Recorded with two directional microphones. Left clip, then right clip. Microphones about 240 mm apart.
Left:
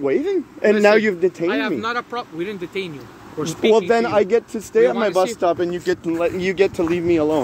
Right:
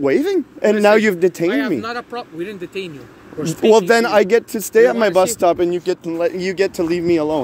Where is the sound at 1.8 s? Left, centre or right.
Right.